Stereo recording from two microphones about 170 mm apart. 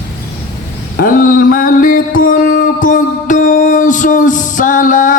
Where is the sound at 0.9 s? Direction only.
55° left (ahead or behind).